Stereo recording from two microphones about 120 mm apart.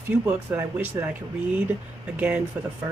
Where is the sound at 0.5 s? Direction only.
20° right (ahead or behind).